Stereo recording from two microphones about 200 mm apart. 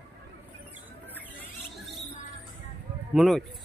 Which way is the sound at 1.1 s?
5° left (ahead or behind).